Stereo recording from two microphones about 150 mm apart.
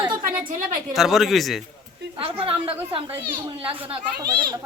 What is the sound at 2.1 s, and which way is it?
A woman's voice, 40° right (ahead or behind).